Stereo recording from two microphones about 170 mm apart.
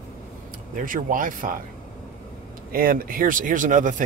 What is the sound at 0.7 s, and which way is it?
Speech, 50° right (ahead or behind).